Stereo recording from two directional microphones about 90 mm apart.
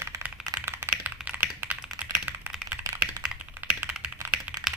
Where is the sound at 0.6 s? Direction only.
30° right (ahead or behind).